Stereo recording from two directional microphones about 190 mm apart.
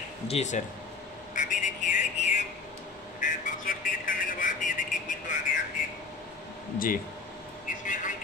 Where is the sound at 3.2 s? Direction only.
45° left (ahead or behind).